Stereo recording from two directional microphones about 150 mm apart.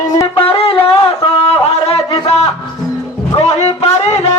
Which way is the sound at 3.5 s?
45° left (ahead or behind).